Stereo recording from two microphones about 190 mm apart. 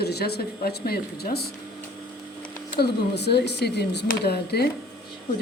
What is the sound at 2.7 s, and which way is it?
A woman's voice, 60° left (ahead or behind).